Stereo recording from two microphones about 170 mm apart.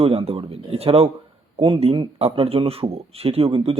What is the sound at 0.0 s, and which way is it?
A man's voice, 35° right (ahead or behind).